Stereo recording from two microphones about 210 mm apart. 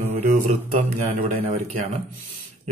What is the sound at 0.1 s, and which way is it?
Mantra, 35° right (ahead or behind).